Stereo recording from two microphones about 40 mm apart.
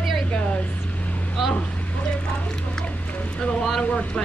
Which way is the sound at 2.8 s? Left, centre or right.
Left.